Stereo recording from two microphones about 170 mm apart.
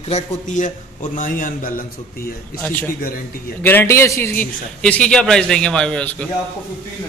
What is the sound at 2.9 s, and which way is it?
Speech, 60° left (ahead or behind).